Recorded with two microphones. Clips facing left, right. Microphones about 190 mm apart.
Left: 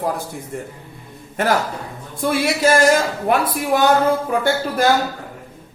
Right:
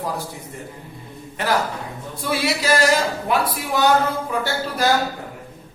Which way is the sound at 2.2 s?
50° left (ahead or behind).